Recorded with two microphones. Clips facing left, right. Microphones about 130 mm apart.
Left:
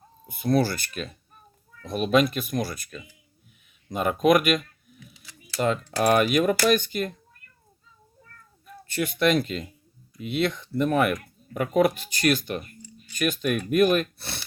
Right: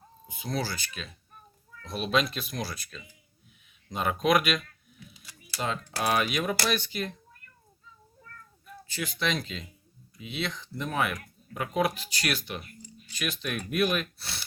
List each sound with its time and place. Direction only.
0.3 s speech: 55° left (ahead or behind)
5.6 s speech: 50° left (ahead or behind)
8.9 s speech: 55° left (ahead or behind)